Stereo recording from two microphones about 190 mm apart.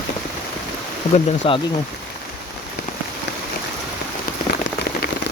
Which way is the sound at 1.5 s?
30° left (ahead or behind).